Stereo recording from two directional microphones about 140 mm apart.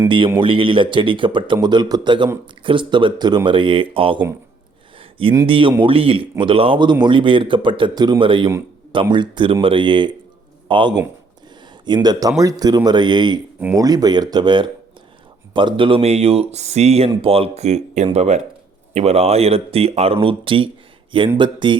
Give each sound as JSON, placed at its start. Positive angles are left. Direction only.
{"t": 0.3, "sound": "speech", "side_deg": -40}
{"t": 5.5, "sound": "speech", "side_deg": -40}